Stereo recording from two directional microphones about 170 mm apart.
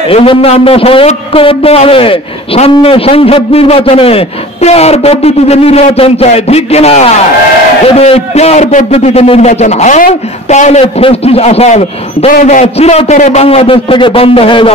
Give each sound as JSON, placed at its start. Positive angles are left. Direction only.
{"t": 0.1, "sound": "a man's voice", "side_deg": 35}